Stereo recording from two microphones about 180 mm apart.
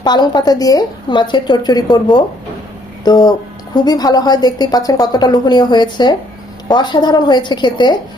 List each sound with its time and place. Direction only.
0.0 s a woman's voice: 25° left (ahead or behind)